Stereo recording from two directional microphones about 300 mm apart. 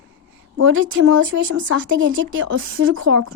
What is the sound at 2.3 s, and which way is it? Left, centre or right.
Speech, right.